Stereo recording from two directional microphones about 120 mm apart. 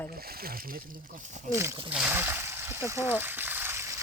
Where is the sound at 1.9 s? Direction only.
10° right (ahead or behind).